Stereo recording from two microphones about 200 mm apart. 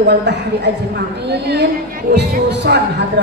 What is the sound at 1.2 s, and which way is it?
Speech, 55° right (ahead or behind).